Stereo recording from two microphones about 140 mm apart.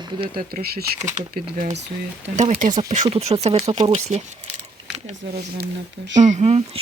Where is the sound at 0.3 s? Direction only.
90° right.